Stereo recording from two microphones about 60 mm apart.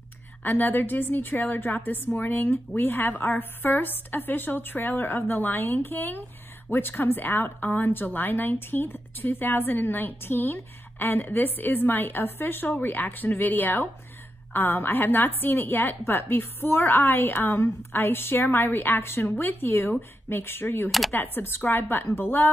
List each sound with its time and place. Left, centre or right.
0.4 s a woman's voice: left